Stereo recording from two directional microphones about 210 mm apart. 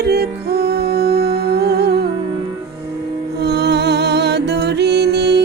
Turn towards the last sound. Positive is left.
turn(degrees=-55)  # may be behind; listen again after turning